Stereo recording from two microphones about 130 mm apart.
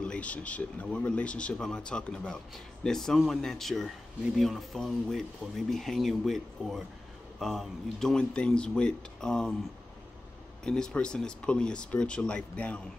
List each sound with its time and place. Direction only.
0.0 s speech: 10° left (ahead or behind)
10.6 s speech: 5° left (ahead or behind)